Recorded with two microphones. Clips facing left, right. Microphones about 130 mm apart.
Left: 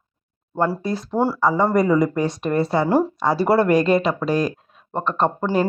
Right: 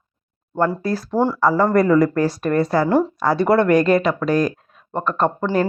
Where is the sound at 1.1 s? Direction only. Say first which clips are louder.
Right 2 dB; 5° left (ahead or behind); by 5.5 s 25° left (ahead or behind).